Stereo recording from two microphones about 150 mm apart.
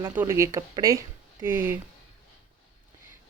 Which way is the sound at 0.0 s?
15° right (ahead or behind).